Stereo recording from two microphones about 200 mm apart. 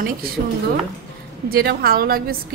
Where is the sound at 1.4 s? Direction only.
50° right (ahead or behind).